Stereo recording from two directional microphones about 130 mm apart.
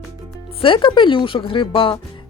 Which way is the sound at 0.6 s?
40° left (ahead or behind).